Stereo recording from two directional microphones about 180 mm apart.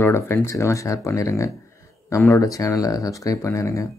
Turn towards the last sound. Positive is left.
turn(degrees=15)  # may be behind; listen again after turning